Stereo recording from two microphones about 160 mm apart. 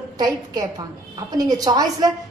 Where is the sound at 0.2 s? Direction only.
25° right (ahead or behind).